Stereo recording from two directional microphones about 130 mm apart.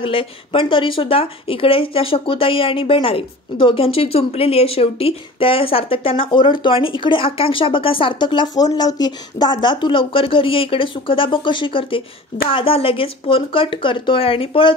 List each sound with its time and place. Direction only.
0.0 s a woman's voice: 45° left (ahead or behind)